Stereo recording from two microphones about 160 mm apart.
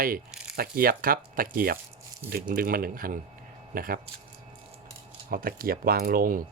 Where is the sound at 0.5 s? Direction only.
70° right (ahead or behind).